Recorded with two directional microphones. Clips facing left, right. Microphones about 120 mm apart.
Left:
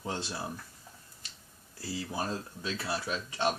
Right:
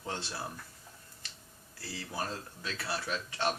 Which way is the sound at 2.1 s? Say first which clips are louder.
Left 1 dB; 20° left (ahead or behind).